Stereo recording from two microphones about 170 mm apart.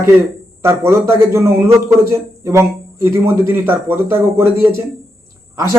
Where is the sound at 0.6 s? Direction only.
15° right (ahead or behind).